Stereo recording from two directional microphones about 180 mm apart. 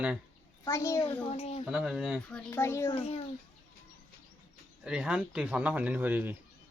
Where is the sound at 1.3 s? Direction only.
35° left (ahead or behind).